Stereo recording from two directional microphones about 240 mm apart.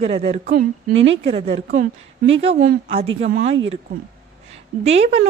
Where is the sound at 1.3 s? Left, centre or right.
Right.